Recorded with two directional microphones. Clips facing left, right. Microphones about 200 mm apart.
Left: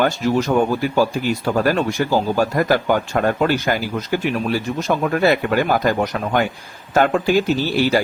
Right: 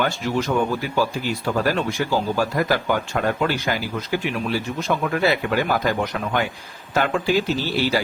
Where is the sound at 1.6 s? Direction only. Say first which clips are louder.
Left 4 dB; 45° left (ahead or behind).